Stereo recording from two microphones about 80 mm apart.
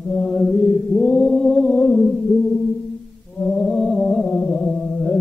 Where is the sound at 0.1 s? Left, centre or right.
Centre.